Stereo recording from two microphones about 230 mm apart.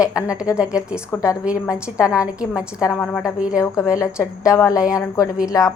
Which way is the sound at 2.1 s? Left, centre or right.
Centre.